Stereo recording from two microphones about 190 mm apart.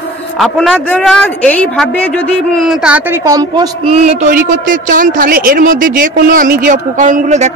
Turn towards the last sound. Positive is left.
turn(degrees=-40)  # may be behind; listen again after turning